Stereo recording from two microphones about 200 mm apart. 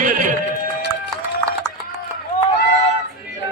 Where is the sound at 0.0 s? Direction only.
40° right (ahead or behind).